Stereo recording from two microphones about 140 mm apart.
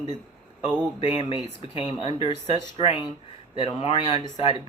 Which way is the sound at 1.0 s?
45° left (ahead or behind).